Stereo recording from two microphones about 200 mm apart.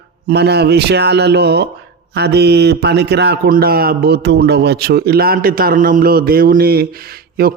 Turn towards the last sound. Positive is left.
turn(degrees=-50)  # may be behind; listen again after turning